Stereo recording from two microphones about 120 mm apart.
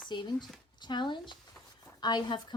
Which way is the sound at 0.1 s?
40° left (ahead or behind).